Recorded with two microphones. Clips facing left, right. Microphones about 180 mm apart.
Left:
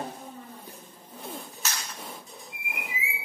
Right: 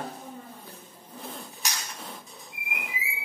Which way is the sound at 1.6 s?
15° right (ahead or behind).